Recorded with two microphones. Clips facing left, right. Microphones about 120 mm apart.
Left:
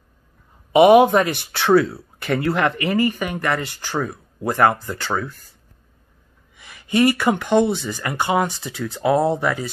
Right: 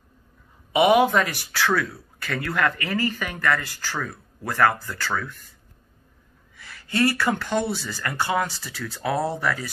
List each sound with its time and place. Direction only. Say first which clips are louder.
0.7 s speech: left 6 dB; 30° left (ahead or behind)
6.5 s speech: left 7 dB; 20° left (ahead or behind)